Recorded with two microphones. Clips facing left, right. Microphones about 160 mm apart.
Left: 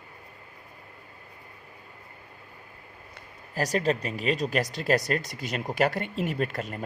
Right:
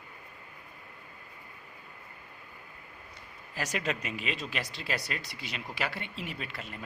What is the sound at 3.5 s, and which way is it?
Speech, 35° left (ahead or behind).